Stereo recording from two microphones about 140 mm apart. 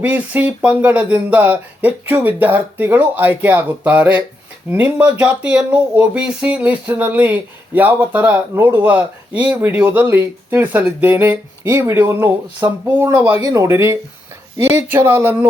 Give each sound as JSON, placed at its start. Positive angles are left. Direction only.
{"t": 0.0, "sound": "speech", "side_deg": -10}